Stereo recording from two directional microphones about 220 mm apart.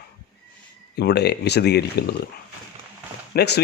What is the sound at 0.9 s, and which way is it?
Speech, 50° left (ahead or behind).